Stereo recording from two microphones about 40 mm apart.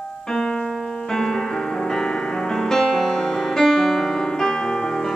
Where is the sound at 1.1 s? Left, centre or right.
Centre.